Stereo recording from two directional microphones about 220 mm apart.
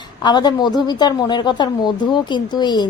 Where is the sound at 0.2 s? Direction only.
20° left (ahead or behind).